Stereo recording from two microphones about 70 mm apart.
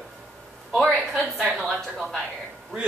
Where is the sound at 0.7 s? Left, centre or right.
Centre.